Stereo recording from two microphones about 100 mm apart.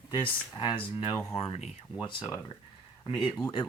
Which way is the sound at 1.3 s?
85° left.